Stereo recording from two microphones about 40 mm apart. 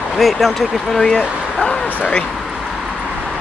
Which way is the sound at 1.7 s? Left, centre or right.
Left.